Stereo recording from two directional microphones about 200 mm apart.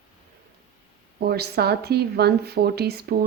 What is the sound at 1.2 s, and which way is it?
Speech, 55° right (ahead or behind).